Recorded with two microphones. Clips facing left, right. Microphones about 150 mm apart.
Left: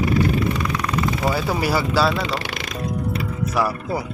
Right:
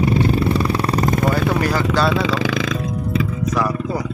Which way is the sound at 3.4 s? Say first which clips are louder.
Right 2 dB; 10° left (ahead or behind).